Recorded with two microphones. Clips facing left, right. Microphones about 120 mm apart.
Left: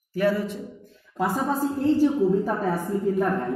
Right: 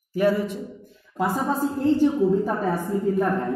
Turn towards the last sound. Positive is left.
turn(degrees=5)  # may be behind; listen again after turning